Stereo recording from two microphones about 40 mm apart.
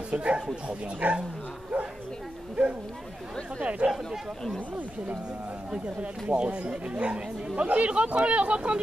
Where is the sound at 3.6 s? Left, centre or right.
Right.